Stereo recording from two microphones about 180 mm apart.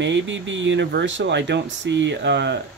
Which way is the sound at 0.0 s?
90° right.